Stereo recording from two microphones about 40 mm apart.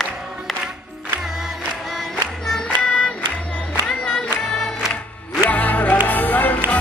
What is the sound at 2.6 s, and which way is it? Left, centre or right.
Child singing, left.